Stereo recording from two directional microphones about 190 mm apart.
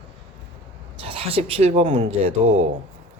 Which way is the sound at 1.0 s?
30° right (ahead or behind).